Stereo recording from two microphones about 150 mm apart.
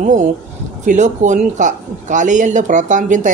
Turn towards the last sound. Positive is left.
turn(degrees=-55)  # may be behind; listen again after turning